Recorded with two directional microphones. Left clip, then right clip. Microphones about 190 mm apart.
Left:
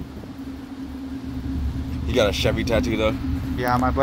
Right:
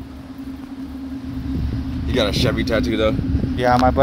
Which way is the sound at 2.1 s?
5° left (ahead or behind).